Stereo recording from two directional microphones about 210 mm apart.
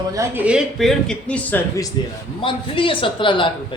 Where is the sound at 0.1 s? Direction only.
10° right (ahead or behind); by 1.9 s 10° left (ahead or behind).